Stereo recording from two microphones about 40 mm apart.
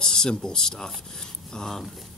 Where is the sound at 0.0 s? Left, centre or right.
Centre.